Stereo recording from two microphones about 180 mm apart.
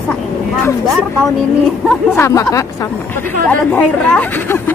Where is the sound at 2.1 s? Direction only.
15° left (ahead or behind).